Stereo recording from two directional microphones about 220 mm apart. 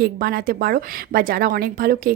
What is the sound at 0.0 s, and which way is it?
Speech, 45° right (ahead or behind).